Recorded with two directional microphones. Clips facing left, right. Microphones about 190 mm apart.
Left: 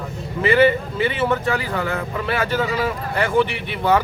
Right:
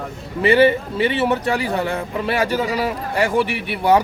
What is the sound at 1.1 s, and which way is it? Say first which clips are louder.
A man's voice: right 2 dB; 20° right (ahead or behind).